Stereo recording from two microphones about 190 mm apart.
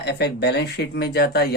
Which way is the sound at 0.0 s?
65° left (ahead or behind).